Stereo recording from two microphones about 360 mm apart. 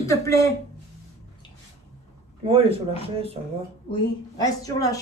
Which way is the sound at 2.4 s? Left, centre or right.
Centre.